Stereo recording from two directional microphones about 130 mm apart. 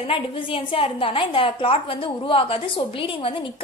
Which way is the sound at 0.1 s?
45° left (ahead or behind).